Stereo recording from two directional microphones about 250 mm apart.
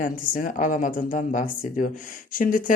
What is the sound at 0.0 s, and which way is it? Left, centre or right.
Speech, left.